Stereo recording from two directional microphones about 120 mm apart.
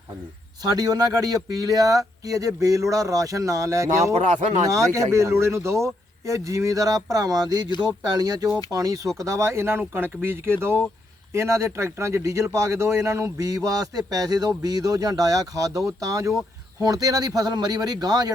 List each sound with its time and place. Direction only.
0.6 s speech: 30° right (ahead or behind)